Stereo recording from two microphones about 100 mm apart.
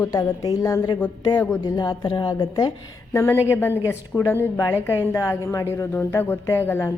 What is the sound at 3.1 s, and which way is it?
A woman's voice, 30° left (ahead or behind).